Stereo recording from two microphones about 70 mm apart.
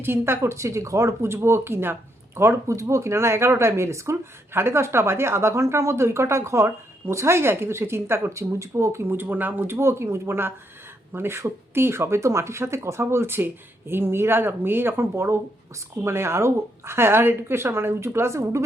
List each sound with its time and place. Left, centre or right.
0.0 s speech: right
9.7 s speech: right